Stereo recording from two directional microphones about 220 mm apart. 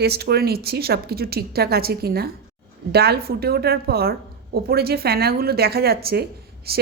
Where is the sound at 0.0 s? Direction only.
45° right (ahead or behind).